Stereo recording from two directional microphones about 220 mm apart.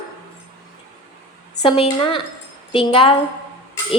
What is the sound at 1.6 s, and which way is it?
A woman's voice, 25° left (ahead or behind).